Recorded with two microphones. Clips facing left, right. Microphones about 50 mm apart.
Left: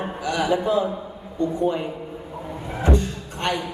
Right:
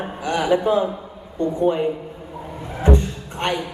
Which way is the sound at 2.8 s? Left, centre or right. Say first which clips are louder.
Right 3 dB; right.